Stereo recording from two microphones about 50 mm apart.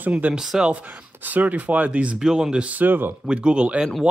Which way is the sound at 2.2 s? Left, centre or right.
Centre.